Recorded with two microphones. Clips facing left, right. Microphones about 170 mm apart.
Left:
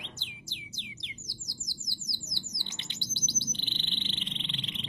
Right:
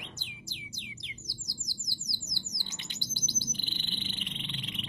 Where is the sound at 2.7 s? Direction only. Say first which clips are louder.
Even; 25° left (ahead or behind).